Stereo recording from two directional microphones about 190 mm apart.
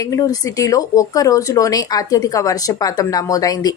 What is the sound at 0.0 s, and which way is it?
A woman's voice, 20° left (ahead or behind).